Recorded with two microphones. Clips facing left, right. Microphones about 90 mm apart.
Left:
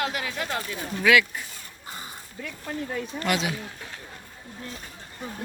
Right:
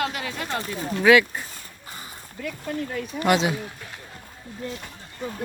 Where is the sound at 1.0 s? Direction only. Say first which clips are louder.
Right 4 dB; 30° right (ahead or behind).